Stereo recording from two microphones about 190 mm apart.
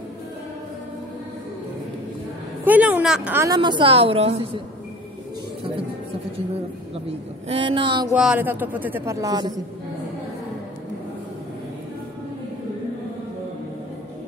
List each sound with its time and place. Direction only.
2.6 s a sound: 10° right (ahead or behind)
3.4 s a woman's voice: 25° right (ahead or behind)
7.4 s a woman's voice: 30° right (ahead or behind)
8.2 s speech: 5° right (ahead or behind)